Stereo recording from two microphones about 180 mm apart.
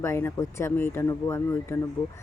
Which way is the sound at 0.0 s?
15° left (ahead or behind).